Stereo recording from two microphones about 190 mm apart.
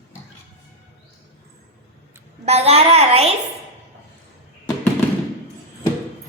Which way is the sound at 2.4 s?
35° right (ahead or behind).